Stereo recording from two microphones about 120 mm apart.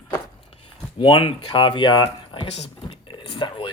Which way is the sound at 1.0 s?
45° left (ahead or behind).